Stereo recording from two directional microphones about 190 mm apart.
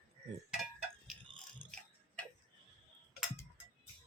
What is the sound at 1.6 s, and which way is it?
Tick-tock, 25° right (ahead or behind).